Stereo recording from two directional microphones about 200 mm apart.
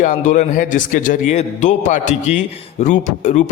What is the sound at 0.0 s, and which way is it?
A man's voice, 40° left (ahead or behind).